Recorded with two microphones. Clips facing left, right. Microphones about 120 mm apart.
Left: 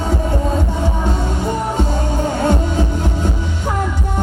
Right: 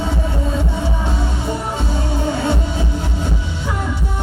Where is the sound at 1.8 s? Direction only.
45° left (ahead or behind).